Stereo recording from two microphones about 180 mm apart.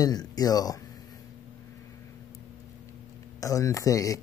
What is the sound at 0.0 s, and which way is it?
Speech, 20° left (ahead or behind).